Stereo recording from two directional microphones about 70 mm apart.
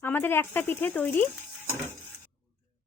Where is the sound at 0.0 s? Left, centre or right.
Left.